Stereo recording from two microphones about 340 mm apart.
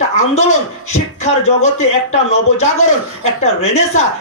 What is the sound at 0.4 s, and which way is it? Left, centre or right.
Speech, centre.